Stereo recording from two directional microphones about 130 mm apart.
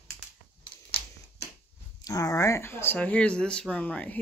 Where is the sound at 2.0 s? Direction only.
25° left (ahead or behind).